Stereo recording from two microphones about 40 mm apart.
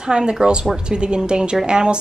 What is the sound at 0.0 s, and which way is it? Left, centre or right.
A woman's voice, right.